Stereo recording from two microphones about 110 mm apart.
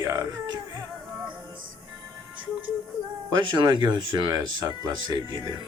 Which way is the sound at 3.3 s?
45° right (ahead or behind).